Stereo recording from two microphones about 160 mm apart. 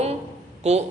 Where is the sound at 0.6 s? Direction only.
45° right (ahead or behind).